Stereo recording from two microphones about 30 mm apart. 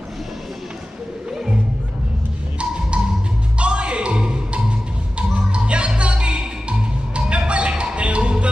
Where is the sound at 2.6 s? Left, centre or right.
Right.